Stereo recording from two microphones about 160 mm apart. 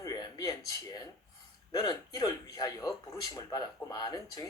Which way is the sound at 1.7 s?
25° left (ahead or behind).